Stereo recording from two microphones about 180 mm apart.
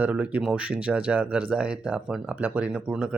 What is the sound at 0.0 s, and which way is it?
Speech, 10° right (ahead or behind).